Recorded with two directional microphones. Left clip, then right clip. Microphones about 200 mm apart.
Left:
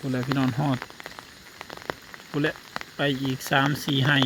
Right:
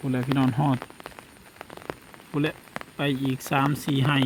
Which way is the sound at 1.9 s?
5° left (ahead or behind).